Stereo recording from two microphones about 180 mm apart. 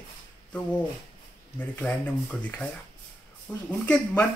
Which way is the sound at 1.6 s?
10° left (ahead or behind).